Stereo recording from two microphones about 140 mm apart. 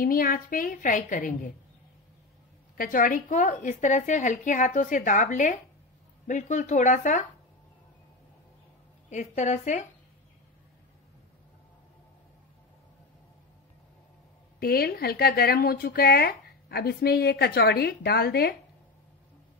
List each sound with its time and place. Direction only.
0.0 s a woman's voice: 90° left; by 1.5 s 70° left (ahead or behind)
2.8 s a woman's voice: 75° left (ahead or behind)
9.1 s a woman's voice: 60° left (ahead or behind)
14.6 s a woman's voice: 90° left